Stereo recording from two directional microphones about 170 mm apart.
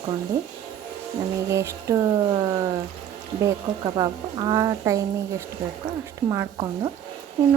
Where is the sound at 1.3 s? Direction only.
15° right (ahead or behind).